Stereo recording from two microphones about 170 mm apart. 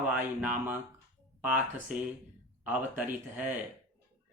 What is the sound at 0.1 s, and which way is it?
Speech, 10° right (ahead or behind).